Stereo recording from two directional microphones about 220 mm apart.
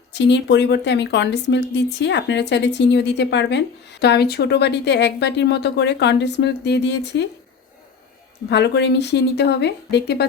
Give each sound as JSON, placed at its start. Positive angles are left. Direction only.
{"t": 0.1, "sound": "a woman's voice", "side_deg": 50}
{"t": 8.4, "sound": "a woman's voice", "side_deg": 50}